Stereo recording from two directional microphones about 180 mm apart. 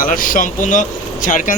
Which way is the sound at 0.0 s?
50° left (ahead or behind).